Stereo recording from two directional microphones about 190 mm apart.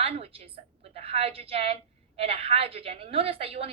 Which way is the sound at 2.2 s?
30° right (ahead or behind).